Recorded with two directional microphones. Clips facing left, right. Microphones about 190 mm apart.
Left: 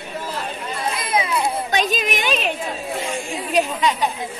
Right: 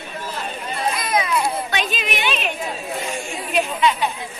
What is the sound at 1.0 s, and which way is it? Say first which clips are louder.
Children playing: left 1 dB; 25° left (ahead or behind).